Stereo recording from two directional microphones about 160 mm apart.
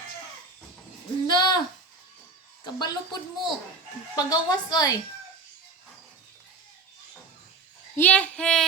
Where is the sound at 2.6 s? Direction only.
25° left (ahead or behind).